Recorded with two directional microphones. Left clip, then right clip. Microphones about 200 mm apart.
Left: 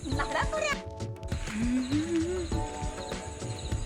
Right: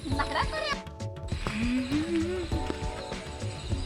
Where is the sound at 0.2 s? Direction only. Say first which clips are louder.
Even; 15° left (ahead or behind).